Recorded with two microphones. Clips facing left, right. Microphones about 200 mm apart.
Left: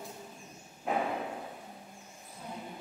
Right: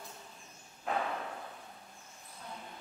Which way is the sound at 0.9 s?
15° left (ahead or behind).